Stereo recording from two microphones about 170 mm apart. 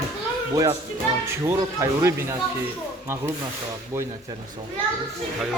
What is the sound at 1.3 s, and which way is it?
Speech, 15° right (ahead or behind).